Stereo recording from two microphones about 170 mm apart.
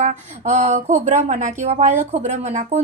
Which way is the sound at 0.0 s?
45° right (ahead or behind).